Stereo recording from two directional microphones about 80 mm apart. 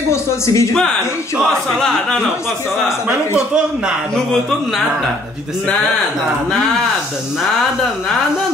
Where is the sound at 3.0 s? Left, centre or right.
Centre.